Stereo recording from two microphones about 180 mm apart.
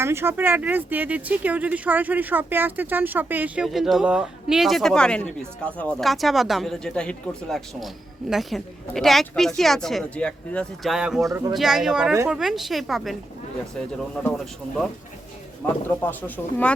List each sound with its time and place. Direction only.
0.0 s speech: 15° right (ahead or behind)
11.2 s speech: 20° right (ahead or behind)
11.5 s speech: centre (ahead or behind)
14.2 s speech: 5° left (ahead or behind)
15.9 s speech: 10° left (ahead or behind)